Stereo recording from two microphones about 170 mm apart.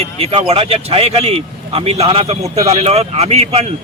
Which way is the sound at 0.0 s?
35° right (ahead or behind).